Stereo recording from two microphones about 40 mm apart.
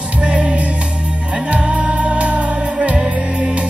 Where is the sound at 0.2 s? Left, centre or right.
Right.